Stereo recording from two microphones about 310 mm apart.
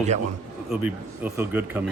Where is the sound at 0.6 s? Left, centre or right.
Centre.